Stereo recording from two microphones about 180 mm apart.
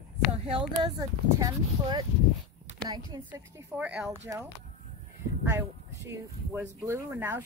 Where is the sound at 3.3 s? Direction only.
10° right (ahead or behind).